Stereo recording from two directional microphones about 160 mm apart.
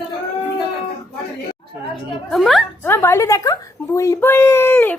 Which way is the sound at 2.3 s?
Centre (ahead or behind).